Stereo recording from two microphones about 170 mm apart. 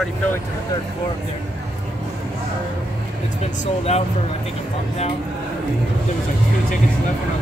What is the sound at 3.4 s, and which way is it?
Speech, 40° left (ahead or behind).